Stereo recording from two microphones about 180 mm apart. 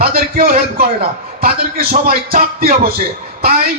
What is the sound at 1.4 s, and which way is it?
Music, 55° right (ahead or behind).